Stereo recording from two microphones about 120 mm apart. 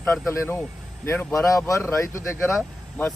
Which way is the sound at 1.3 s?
25° left (ahead or behind).